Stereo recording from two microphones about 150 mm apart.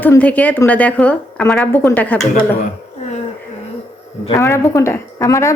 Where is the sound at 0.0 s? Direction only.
10° left (ahead or behind).